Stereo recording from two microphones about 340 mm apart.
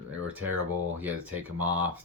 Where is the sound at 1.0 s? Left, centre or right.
Centre.